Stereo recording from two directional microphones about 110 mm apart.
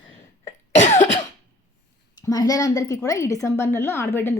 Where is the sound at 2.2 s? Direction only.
35° left (ahead or behind).